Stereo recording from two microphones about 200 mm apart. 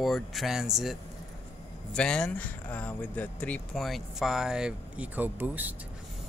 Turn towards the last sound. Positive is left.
turn(degrees=-10)  # may be behind; listen again after turning